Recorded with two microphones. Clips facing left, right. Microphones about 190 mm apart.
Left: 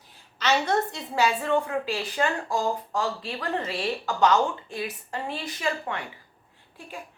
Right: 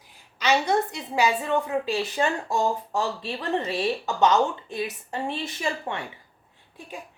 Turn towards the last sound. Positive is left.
turn(degrees=-25)  # may be behind; listen again after turning